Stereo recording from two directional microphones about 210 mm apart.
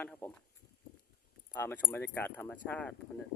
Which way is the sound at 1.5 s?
10° left (ahead or behind).